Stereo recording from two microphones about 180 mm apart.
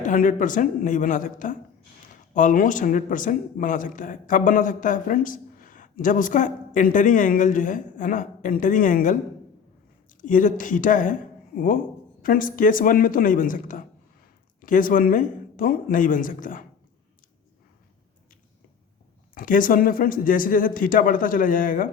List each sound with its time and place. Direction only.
0.0 s speech: 45° left (ahead or behind)
10.2 s speech: 45° left (ahead or behind)
19.3 s speech: 50° left (ahead or behind)